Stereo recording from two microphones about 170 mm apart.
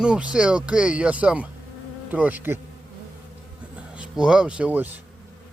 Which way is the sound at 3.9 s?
5° right (ahead or behind).